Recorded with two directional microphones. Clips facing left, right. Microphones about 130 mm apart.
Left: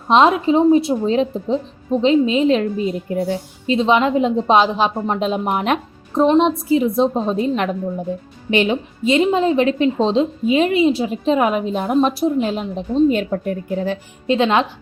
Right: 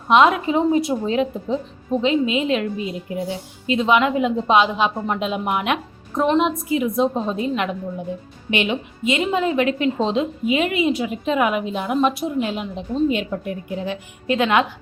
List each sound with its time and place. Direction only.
0.1 s a woman's voice: 30° left (ahead or behind)
3.7 s a woman's voice: 30° left (ahead or behind)
6.2 s a woman's voice: 25° left (ahead or behind)
14.3 s a woman's voice: 25° left (ahead or behind)